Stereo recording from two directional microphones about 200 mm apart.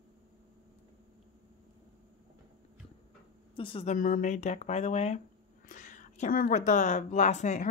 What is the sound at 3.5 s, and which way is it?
Speech, 25° left (ahead or behind).